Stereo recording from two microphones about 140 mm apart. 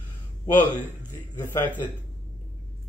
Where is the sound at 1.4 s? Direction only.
15° left (ahead or behind).